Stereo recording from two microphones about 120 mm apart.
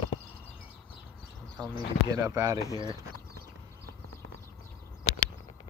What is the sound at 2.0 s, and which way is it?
Speech, 25° right (ahead or behind).